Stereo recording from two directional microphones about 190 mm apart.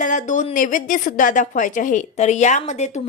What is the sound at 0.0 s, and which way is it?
A woman's voice, 40° left (ahead or behind).